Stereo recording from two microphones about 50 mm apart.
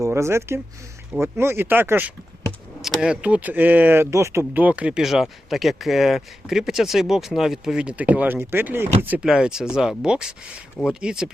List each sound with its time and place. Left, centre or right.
0.1 s speech: right
2.8 s speech: centre
3.2 s speech: right
4.1 s speech: right
4.7 s speech: right
5.0 s speech: centre
7.9 s speech: right
8.4 s speech: right
9.2 s speech: centre